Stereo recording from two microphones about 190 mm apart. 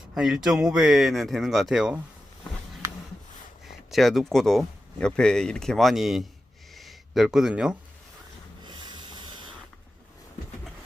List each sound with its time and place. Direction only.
0.1 s speech: centre (ahead or behind)
3.9 s speech: centre (ahead or behind)
6.7 s a sound: centre (ahead or behind)
8.6 s rub: 25° right (ahead or behind)